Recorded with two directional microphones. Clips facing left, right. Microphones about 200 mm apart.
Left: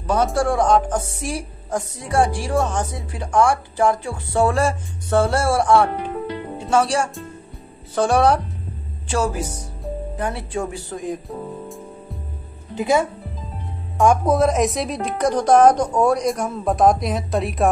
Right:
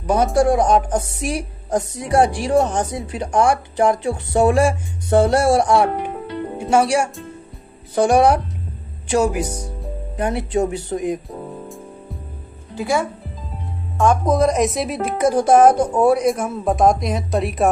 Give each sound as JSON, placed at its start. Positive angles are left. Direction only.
{"t": 0.0, "sound": "speech", "side_deg": -15}
{"t": 11.2, "sound": "music", "side_deg": 0}
{"t": 12.7, "sound": "speech", "side_deg": 20}
{"t": 13.9, "sound": "a woman's voice", "side_deg": 10}